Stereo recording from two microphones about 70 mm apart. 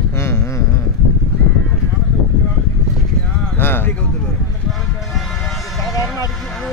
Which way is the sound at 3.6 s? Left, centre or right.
Left.